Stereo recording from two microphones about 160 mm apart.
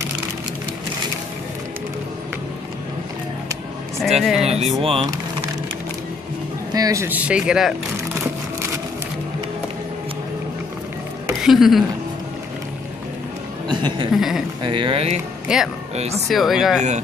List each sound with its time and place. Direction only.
4.2 s speech: 5° right (ahead or behind)
4.5 s speech: 40° right (ahead or behind)
6.7 s speech: 20° right (ahead or behind); by 7.7 s 5° right (ahead or behind)
11.4 s speech: centre (ahead or behind)
13.7 s speech: 30° right (ahead or behind)
14.1 s speech: centre (ahead or behind)
14.6 s speech: 30° right (ahead or behind)
15.4 s speech: 5° right (ahead or behind)
15.9 s speech: 40° right (ahead or behind)
16.3 s speech: centre (ahead or behind)